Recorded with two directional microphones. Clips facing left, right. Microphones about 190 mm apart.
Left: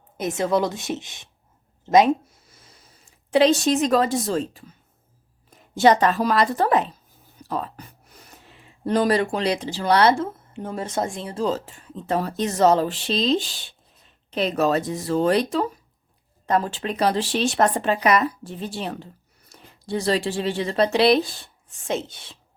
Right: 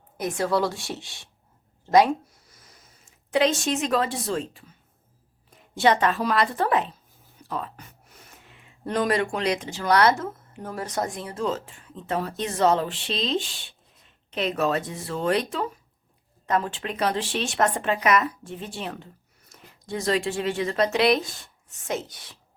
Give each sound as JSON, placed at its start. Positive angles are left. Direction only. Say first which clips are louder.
{"t": 0.2, "sound": "a woman's voice", "louder": "left 2 dB", "side_deg": 25}
{"t": 1.8, "sound": "a sound", "louder": "left 2 dB", "side_deg": 20}
{"t": 3.1, "sound": "speech", "louder": "left 5 dB", "side_deg": 30}
{"t": 5.7, "sound": "speech", "louder": "left 4 dB", "side_deg": 40}